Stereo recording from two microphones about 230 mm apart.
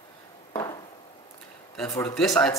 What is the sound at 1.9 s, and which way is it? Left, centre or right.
Speech, centre.